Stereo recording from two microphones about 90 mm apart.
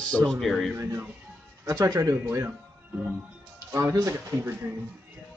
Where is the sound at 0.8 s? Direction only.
35° right (ahead or behind).